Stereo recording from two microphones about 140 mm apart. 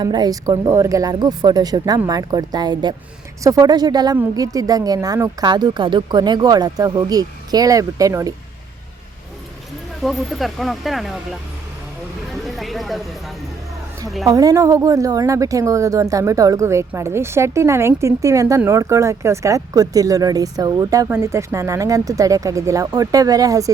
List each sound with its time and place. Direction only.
0.0 s speech: 30° right (ahead or behind)
10.0 s speech: centre (ahead or behind)
14.3 s speech: 25° right (ahead or behind)